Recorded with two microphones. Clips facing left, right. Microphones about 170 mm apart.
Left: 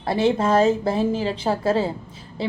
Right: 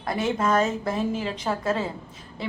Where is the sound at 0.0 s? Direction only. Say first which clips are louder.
Left 5 dB; 30° left (ahead or behind).